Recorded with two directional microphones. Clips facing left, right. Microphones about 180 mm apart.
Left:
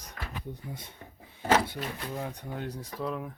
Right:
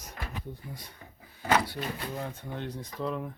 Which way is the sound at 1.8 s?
10° left (ahead or behind).